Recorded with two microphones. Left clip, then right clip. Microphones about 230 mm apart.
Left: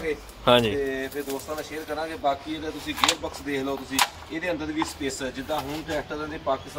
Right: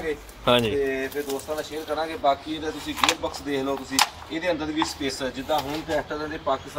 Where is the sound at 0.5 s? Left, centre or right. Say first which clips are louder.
Left 1 dB; centre.